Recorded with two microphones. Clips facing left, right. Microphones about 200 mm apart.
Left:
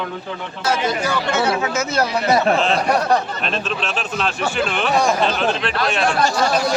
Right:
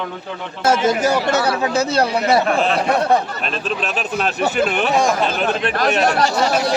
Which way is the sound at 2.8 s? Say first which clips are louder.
Right 1 dB; 25° right (ahead or behind).